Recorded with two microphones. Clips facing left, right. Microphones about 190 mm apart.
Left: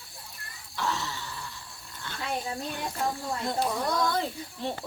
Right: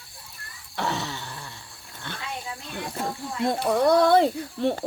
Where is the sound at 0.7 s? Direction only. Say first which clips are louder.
Right 3 dB; 65° right (ahead or behind).